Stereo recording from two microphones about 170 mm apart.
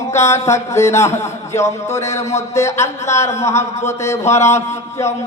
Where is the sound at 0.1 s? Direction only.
15° left (ahead or behind).